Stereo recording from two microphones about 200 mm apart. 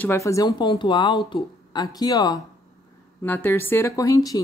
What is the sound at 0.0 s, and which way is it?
Speech, 15° left (ahead or behind).